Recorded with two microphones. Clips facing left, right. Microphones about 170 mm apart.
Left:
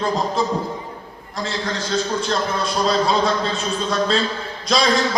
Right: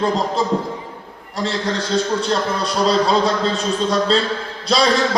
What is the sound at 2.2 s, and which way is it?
Speech, 35° right (ahead or behind).